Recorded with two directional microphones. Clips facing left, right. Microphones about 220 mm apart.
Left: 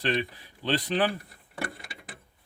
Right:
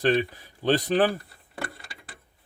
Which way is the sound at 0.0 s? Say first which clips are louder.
Right 6 dB; 45° right (ahead or behind).